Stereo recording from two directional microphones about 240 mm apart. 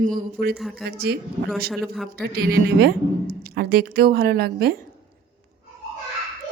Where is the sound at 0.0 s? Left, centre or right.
Right.